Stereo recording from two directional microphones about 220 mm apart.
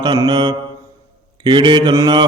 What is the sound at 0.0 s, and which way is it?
Mantra, 20° right (ahead or behind).